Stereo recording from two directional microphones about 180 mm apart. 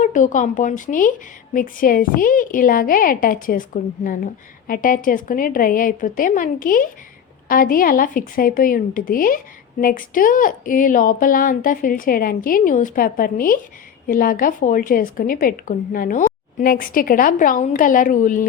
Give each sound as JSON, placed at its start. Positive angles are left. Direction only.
{"t": 0.0, "sound": "a woman's voice", "side_deg": 45}